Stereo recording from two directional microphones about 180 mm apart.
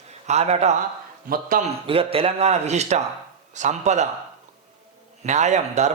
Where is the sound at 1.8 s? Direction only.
30° right (ahead or behind).